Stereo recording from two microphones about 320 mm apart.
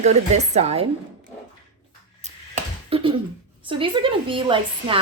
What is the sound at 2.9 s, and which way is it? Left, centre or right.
Finger snapping, centre.